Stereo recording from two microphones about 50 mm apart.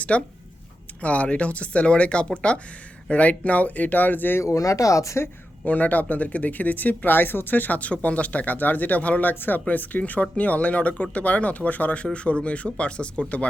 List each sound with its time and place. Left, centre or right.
0.1 s speech: left
4.4 s speech: left
5.6 s speech: left
9.3 s speech: left
9.6 s speech: left